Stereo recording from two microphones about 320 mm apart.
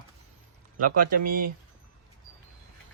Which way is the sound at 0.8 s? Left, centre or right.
Right.